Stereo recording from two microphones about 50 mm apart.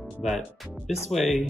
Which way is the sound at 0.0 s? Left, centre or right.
Centre.